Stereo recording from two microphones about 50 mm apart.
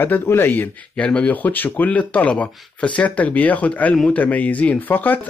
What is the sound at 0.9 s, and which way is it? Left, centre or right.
Speech, centre.